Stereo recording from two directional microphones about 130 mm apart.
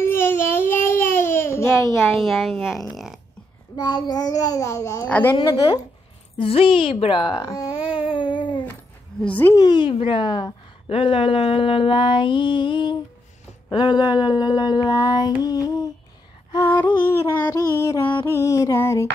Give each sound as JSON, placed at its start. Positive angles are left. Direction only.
{"t": 0.1, "sound": "babbling", "side_deg": 20}
{"t": 2.0, "sound": "a woman's voice", "side_deg": -5}
{"t": 2.9, "sound": "a sound", "side_deg": 0}
{"t": 3.7, "sound": "a child's voice", "side_deg": 35}
{"t": 5.0, "sound": "speech", "side_deg": 10}
{"t": 5.3, "sound": "a woman's voice", "side_deg": 40}
{"t": 7.3, "sound": "a child's voice", "side_deg": 25}
{"t": 7.9, "sound": "a sound", "side_deg": 40}
{"t": 9.2, "sound": "speech", "side_deg": 15}
{"t": 9.6, "sound": "a woman's voice", "side_deg": 35}
{"t": 16.5, "sound": "a sound", "side_deg": 15}
{"t": 17.7, "sound": "a child's voice", "side_deg": 25}